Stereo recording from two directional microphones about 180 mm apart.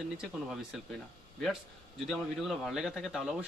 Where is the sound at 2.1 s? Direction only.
Centre (ahead or behind).